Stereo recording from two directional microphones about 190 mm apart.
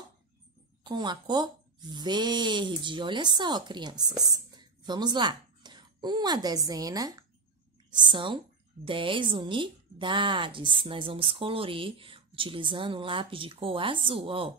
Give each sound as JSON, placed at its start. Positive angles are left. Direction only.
{"t": 0.8, "sound": "a woman's voice", "side_deg": -25}